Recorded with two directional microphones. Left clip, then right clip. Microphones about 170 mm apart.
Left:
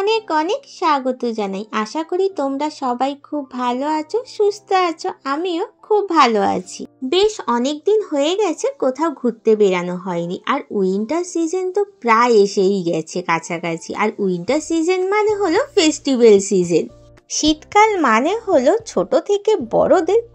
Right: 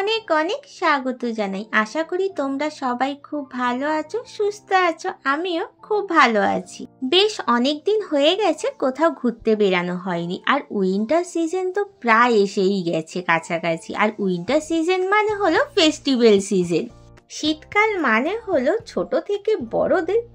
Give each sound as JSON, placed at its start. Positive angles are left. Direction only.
{"t": 0.0, "sound": "speech", "side_deg": 5}
{"t": 7.1, "sound": "speech", "side_deg": -15}
{"t": 12.3, "sound": "a woman's voice", "side_deg": -45}
{"t": 13.2, "sound": "speech", "side_deg": 0}
{"t": 17.3, "sound": "speech", "side_deg": 35}